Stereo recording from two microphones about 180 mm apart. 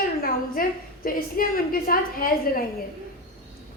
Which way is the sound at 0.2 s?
55° left (ahead or behind).